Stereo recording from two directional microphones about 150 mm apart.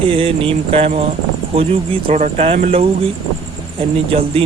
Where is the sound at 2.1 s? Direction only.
50° right (ahead or behind).